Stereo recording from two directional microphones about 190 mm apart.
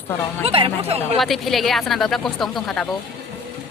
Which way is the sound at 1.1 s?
Centre (ahead or behind).